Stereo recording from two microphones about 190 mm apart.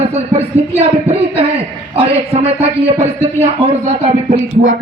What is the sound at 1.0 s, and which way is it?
A man's voice, 30° right (ahead or behind).